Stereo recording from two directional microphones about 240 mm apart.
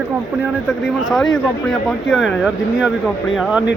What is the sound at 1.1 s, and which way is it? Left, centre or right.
Speech, centre.